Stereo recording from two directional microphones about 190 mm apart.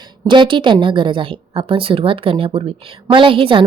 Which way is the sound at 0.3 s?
25° right (ahead or behind).